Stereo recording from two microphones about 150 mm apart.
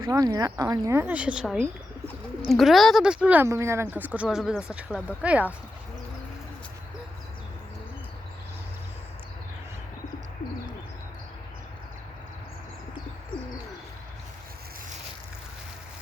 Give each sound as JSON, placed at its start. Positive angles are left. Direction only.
{"t": 0.0, "sound": "speech", "side_deg": -25}